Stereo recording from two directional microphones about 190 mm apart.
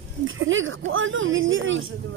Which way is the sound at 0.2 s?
90° right.